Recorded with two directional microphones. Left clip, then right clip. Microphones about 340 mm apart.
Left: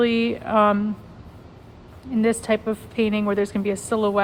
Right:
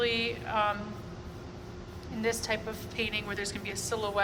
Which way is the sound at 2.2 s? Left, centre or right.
Centre.